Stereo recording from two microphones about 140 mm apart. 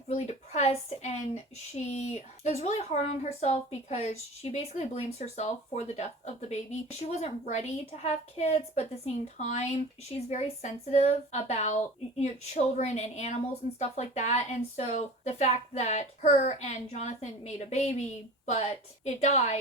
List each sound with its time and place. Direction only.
0.1 s a woman's voice: 55° left (ahead or behind)